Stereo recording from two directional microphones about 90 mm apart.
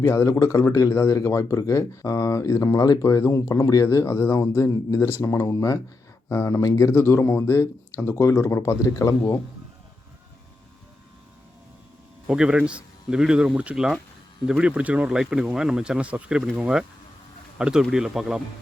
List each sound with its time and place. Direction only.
0.0 s speech: 35° left (ahead or behind)
12.3 s speech: 10° right (ahead or behind)